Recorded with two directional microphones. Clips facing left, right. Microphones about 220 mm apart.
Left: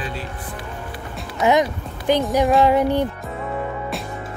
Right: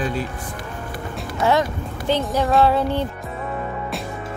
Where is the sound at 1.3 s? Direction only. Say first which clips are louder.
Left 2 dB; 15° left (ahead or behind).